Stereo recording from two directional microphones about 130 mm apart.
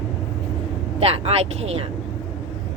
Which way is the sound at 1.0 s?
50° right (ahead or behind).